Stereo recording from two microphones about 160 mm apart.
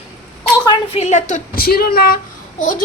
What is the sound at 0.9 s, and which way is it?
Speech, 45° left (ahead or behind).